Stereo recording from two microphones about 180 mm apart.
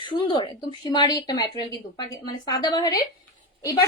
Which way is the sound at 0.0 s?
25° left (ahead or behind).